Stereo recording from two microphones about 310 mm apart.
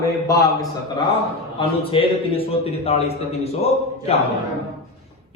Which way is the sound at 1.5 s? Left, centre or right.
Centre.